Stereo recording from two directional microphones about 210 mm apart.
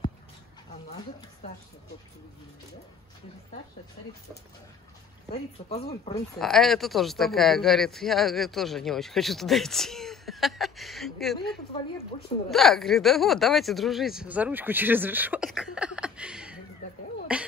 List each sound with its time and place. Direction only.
5.3 s speech: 30° left (ahead or behind)
6.3 s a man's voice: centre (ahead or behind)
17.3 s beatboxing: 5° right (ahead or behind)